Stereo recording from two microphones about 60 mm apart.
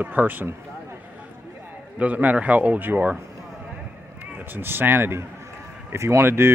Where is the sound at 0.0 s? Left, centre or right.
Right.